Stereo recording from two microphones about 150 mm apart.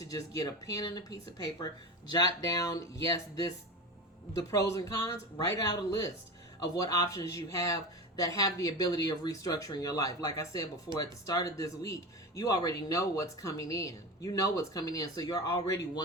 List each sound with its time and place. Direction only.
0.0 s speech: 25° left (ahead or behind)
6.6 s speech: 25° left (ahead or behind)